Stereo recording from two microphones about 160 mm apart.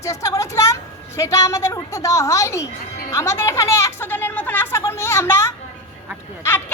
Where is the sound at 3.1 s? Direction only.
15° left (ahead or behind).